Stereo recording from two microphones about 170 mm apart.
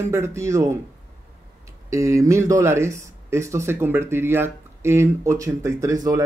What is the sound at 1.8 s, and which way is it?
Speech, 15° right (ahead or behind).